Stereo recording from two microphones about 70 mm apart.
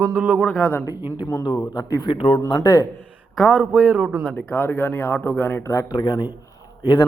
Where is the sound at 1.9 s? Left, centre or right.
Left.